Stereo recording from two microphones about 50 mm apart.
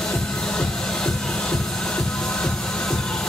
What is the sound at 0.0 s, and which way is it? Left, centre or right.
Music, centre.